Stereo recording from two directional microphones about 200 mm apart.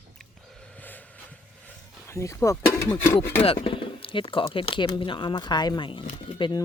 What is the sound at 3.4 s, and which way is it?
Speech, 30° left (ahead or behind).